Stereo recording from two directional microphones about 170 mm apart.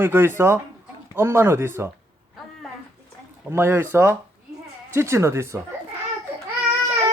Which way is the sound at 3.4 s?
15° right (ahead or behind).